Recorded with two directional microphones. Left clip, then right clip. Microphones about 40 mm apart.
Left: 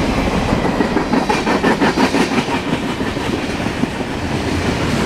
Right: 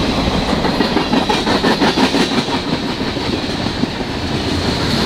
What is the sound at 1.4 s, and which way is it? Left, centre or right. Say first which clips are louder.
Vehicle: right 1 dB; right.